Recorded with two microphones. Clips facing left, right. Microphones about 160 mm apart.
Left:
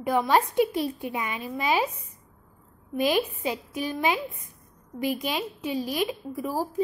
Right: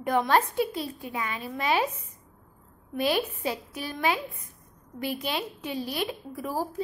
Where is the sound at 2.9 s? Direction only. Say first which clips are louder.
Left 2 dB; 15° left (ahead or behind).